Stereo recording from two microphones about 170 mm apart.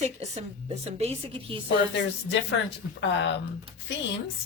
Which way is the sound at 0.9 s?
35° right (ahead or behind).